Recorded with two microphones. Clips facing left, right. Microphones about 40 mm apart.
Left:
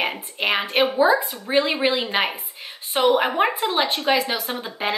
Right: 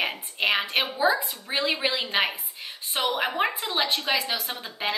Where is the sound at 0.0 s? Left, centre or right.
Centre.